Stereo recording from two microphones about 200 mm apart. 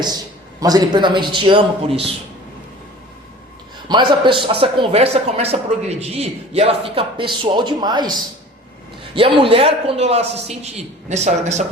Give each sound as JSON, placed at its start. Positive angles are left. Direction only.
{"t": 0.6, "sound": "speech", "side_deg": -20}
{"t": 3.8, "sound": "speech", "side_deg": -25}
{"t": 9.1, "sound": "a man's voice", "side_deg": -25}